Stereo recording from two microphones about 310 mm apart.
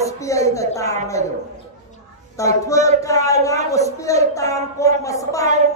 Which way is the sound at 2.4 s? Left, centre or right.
Centre.